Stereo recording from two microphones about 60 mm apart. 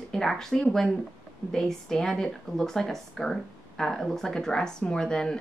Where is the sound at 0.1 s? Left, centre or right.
Centre.